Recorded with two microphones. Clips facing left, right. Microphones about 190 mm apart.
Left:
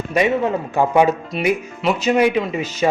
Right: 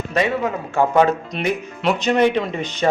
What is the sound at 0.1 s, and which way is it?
A man's voice, 15° left (ahead or behind).